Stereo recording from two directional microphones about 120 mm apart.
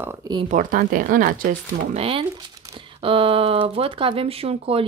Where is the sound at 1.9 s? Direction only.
50° right (ahead or behind).